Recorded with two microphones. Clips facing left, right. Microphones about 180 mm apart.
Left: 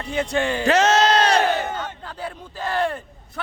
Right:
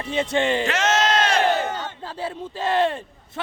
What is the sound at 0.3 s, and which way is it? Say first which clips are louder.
Speech: right 2 dB; 20° right (ahead or behind).